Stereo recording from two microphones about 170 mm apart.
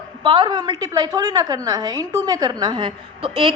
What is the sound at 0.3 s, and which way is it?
A man's voice, 25° right (ahead or behind).